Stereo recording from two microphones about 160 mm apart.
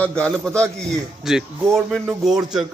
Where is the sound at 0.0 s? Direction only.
5° left (ahead or behind).